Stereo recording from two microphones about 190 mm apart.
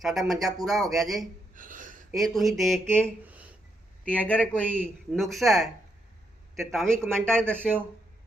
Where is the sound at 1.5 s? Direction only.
45° right (ahead or behind).